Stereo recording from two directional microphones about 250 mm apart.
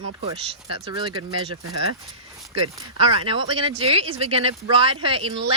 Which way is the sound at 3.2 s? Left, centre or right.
Right.